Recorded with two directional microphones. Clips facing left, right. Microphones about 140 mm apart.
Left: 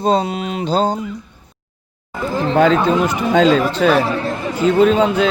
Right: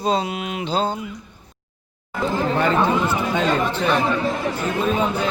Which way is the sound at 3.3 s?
90° left.